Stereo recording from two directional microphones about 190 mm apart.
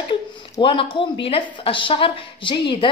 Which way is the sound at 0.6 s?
25° left (ahead or behind).